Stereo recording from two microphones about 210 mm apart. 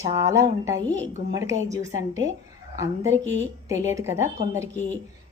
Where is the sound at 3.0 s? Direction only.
60° right (ahead or behind).